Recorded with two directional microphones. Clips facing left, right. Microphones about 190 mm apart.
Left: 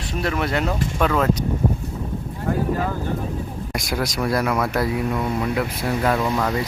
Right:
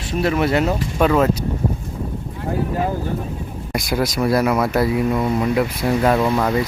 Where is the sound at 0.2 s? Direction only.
5° right (ahead or behind).